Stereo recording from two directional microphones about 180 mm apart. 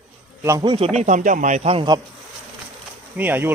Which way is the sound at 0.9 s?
45° right (ahead or behind).